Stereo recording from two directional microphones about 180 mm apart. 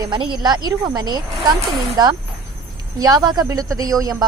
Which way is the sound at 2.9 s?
20° right (ahead or behind).